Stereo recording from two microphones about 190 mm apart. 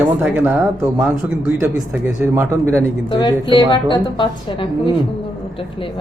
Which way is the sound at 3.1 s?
20° left (ahead or behind).